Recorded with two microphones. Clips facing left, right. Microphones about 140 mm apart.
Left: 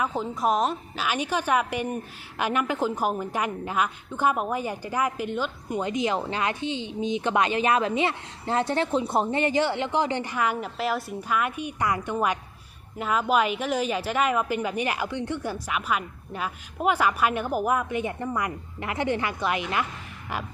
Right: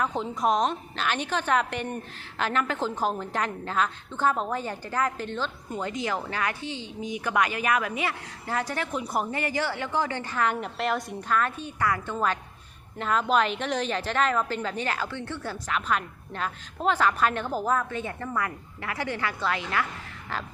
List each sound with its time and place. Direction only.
0.0 s a woman's voice: centre (ahead or behind)